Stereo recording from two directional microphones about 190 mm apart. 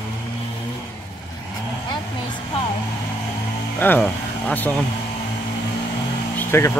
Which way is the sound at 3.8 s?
10° left (ahead or behind).